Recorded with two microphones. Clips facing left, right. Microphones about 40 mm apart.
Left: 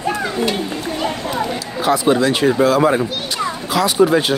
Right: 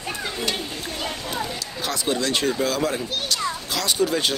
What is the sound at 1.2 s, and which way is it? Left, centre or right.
Speech, left.